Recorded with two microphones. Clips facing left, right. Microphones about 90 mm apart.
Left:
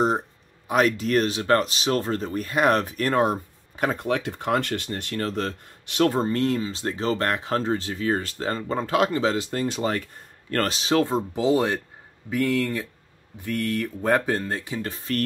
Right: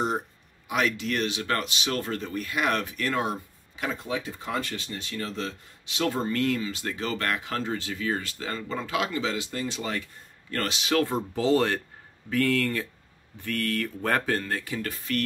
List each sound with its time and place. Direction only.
0.7 s speech: 40° left (ahead or behind)
6.0 s speech: 35° left (ahead or behind)